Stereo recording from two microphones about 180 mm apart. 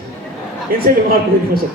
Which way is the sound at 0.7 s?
55° right (ahead or behind).